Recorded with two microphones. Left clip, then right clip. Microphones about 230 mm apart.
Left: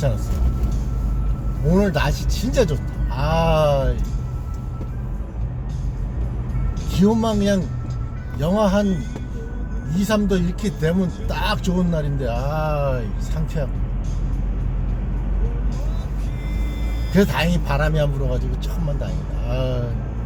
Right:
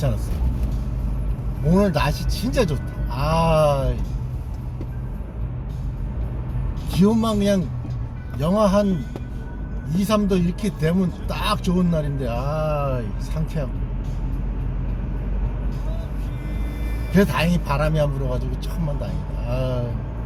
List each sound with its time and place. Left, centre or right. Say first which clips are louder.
1.7 s speech: even; right
6.9 s speech: left 1 dB; right
9.9 s speech: even; centre
17.1 s speech: left 1 dB; centre
19.5 s speech: left 1 dB; centre